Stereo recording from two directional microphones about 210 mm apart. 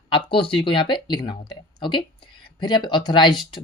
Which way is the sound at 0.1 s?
25° left (ahead or behind).